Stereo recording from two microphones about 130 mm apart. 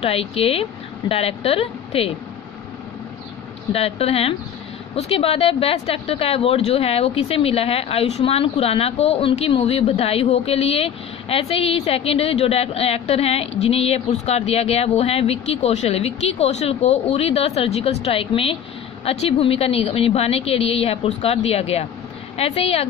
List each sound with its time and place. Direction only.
0.0 s speech: 50° left (ahead or behind)
3.7 s speech: 50° left (ahead or behind)